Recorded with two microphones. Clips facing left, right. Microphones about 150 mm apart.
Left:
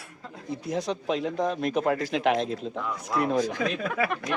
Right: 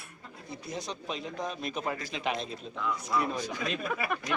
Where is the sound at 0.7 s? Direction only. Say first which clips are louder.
Left 9 dB; 65° left (ahead or behind).